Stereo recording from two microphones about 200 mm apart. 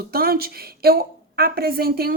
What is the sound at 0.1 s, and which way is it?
A woman's voice, 50° right (ahead or behind).